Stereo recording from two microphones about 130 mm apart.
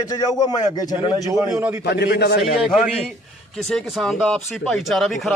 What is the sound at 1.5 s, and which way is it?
Speech, 15° right (ahead or behind).